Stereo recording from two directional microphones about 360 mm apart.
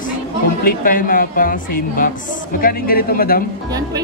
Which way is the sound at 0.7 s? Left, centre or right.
Left.